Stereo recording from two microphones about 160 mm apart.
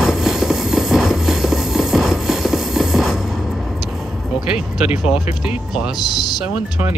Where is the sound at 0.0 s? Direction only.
Centre (ahead or behind).